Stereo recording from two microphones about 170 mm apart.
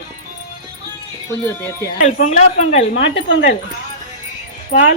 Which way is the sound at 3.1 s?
90° left.